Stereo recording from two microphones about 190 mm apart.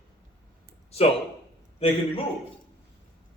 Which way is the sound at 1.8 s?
30° left (ahead or behind).